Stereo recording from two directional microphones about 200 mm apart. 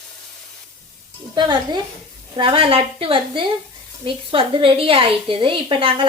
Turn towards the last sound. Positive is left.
turn(degrees=-25)  # may be behind; listen again after turning